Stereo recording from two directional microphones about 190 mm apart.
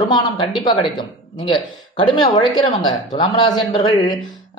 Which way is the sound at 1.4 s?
25° left (ahead or behind).